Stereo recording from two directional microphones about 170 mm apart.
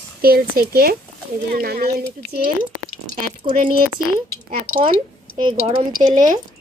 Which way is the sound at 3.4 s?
35° right (ahead or behind).